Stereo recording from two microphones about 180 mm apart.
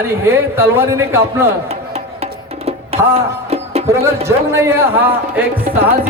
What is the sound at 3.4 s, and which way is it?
Music, 35° right (ahead or behind).